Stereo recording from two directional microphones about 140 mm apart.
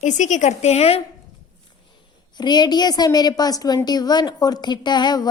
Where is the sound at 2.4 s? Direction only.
30° left (ahead or behind).